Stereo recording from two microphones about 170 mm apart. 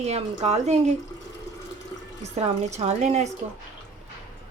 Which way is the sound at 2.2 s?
40° right (ahead or behind).